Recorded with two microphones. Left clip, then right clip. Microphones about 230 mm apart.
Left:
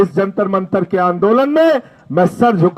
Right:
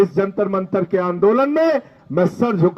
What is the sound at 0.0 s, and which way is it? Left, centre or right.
Speech, left.